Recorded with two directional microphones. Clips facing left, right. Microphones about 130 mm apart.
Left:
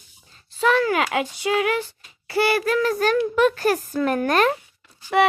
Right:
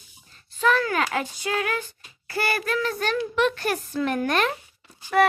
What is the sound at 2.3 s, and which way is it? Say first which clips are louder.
A child's voice: left 6 dB; 30° left (ahead or behind).